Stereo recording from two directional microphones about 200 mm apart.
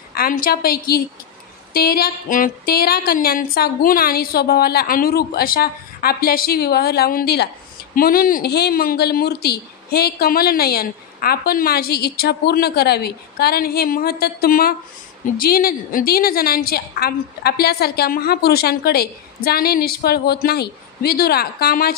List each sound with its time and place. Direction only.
0.1 s speech: 45° left (ahead or behind)